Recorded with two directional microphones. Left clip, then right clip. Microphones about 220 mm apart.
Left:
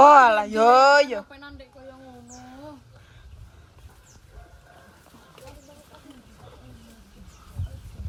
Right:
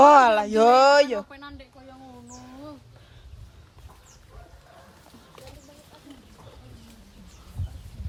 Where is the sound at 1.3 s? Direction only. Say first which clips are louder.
Right 1 dB; centre (ahead or behind).